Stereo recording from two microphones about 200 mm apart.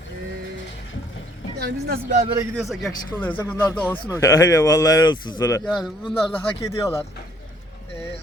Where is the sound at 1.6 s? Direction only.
55° right (ahead or behind).